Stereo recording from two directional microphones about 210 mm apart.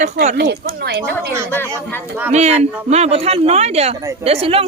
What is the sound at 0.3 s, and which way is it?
Speech, 50° right (ahead or behind).